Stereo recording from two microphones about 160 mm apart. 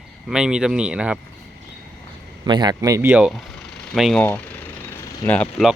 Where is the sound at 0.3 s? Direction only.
5° right (ahead or behind).